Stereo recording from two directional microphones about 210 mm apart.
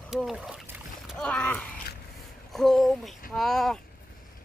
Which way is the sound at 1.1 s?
5° left (ahead or behind).